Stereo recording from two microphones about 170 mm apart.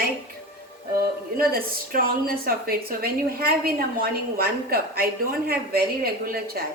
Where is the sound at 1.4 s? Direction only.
60° right (ahead or behind).